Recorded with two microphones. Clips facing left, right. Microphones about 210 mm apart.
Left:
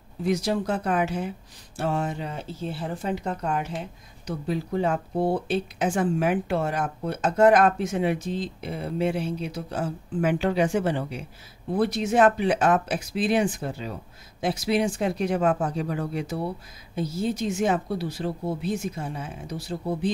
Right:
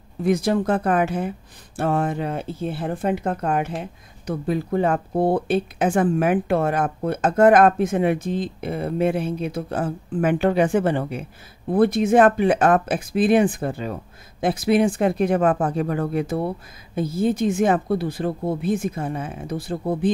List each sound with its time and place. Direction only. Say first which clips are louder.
0.2 s speech: right 5 dB; 55° right (ahead or behind)